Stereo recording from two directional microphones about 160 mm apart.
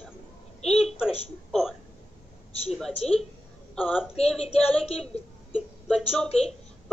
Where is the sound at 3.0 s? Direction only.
40° left (ahead or behind).